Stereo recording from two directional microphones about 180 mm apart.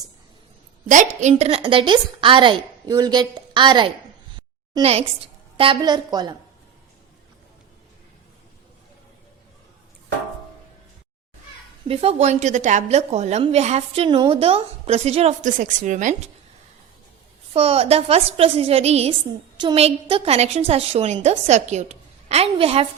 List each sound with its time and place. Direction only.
0.9 s a woman's voice: 45° right (ahead or behind); by 3.9 s 25° right (ahead or behind)
4.4 s a sound: 30° right (ahead or behind)
5.5 s a woman's voice: 25° right (ahead or behind)
11.9 s a woman's voice: 35° right (ahead or behind)
17.5 s a woman's voice: 35° right (ahead or behind)